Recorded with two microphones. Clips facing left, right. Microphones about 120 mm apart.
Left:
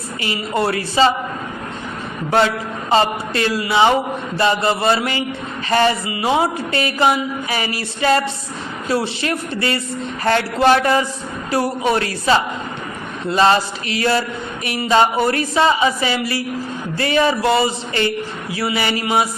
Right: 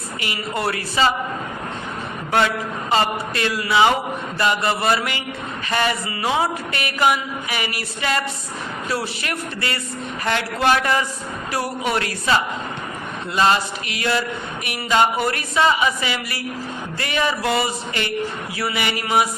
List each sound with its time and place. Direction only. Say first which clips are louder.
0.2 s speech: left 5 dB; 25° left (ahead or behind)
2.9 s speech: left 4 dB; 30° left (ahead or behind)
6.1 s speech: left 4 dB; 15° left (ahead or behind)
6.3 s speech: left 5 dB; 30° left (ahead or behind)